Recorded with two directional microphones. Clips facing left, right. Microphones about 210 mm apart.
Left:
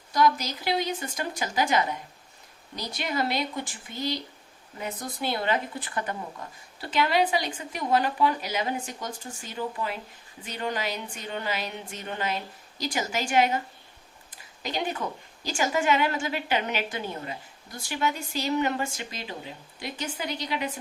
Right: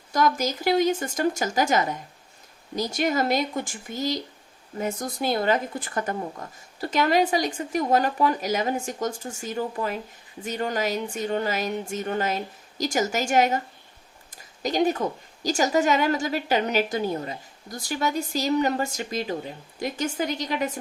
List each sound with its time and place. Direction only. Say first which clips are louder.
0.1 s speech: right 1 dB; 45° right (ahead or behind)
14.6 s a woman's voice: right 8 dB; 45° right (ahead or behind)